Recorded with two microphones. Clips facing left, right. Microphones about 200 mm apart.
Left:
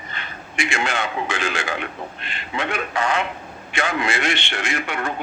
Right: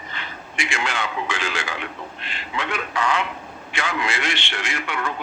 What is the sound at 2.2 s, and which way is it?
Speech, 55° left (ahead or behind).